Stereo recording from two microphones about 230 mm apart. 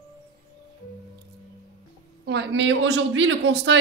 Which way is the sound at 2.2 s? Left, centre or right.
Right.